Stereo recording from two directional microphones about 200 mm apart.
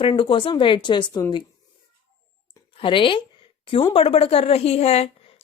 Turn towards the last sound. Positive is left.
turn(degrees=30)  # may be behind; listen again after turning